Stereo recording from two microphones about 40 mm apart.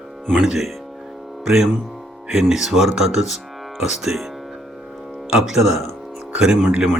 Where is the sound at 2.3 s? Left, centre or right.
Centre.